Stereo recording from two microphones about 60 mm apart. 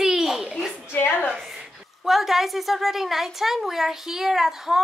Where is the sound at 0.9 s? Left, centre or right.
Left.